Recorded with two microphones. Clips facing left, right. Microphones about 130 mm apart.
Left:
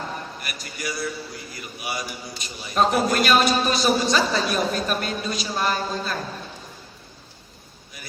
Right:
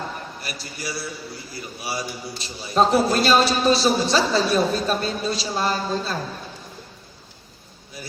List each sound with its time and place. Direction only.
0.4 s a man's voice: 30° right (ahead or behind)